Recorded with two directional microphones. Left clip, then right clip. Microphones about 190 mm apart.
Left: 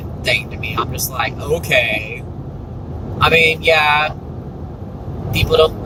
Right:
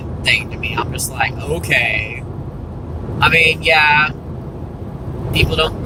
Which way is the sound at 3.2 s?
20° left (ahead or behind).